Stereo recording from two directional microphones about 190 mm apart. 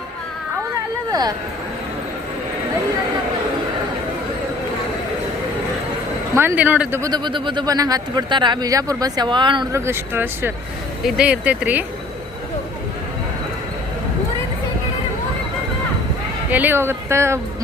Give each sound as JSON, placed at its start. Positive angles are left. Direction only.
{"t": 6.3, "sound": "speech", "side_deg": -10}
{"t": 9.8, "sound": "speech", "side_deg": -10}
{"t": 16.5, "sound": "speech", "side_deg": -10}